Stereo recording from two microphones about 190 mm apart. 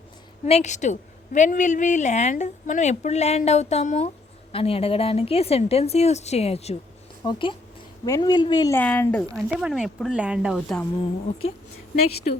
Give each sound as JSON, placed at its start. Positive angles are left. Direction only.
{"t": 0.4, "sound": "a woman's voice", "side_deg": 35}
{"t": 8.8, "sound": "a woman's voice", "side_deg": 10}
{"t": 9.6, "sound": "speech", "side_deg": -5}